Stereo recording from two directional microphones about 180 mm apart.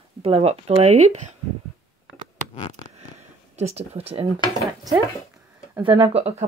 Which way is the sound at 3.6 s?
35° right (ahead or behind).